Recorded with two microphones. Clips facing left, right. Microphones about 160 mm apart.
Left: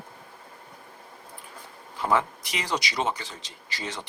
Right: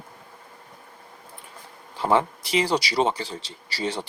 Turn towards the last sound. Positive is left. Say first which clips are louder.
# right 7 dB
turn(degrees=-30)  # may be behind; listen again after turning